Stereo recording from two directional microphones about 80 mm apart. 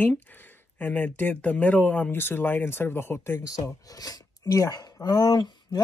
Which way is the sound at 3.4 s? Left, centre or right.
Left.